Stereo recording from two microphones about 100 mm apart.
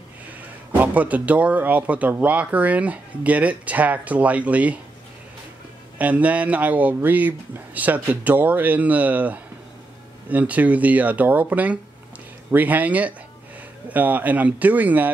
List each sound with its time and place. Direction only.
0.7 s speech: 15° right (ahead or behind)
5.9 s speech: 15° right (ahead or behind)